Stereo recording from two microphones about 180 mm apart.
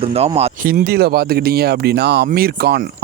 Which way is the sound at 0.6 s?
60° right (ahead or behind).